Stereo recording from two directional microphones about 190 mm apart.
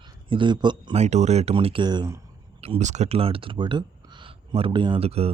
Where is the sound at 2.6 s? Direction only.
35° right (ahead or behind).